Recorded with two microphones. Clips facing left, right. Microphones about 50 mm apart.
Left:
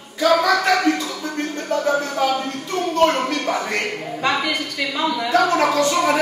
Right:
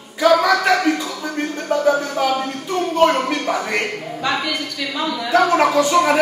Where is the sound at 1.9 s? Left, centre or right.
Centre.